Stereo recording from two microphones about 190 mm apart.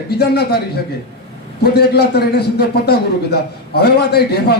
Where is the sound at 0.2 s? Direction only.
55° left (ahead or behind).